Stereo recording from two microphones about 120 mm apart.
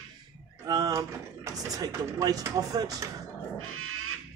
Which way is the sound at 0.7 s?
30° right (ahead or behind).